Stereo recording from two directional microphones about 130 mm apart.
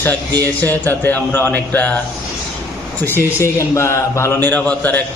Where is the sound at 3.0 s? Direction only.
20° left (ahead or behind).